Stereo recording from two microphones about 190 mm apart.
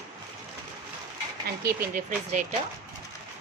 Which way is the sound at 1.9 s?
45° right (ahead or behind).